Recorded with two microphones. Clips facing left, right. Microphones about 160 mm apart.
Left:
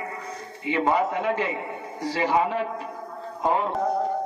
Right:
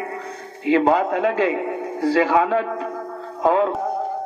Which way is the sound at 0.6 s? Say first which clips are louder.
Right 6 dB; 90° right.